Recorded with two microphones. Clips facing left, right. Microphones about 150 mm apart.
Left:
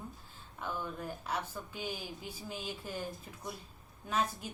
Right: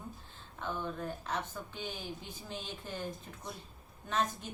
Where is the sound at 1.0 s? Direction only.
10° left (ahead or behind).